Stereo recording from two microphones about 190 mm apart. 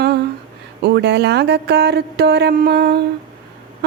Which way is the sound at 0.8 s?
60° right (ahead or behind).